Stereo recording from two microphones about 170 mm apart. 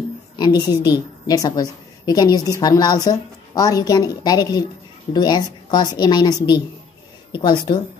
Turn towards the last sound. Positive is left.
turn(degrees=25)  # may be behind; listen again after turning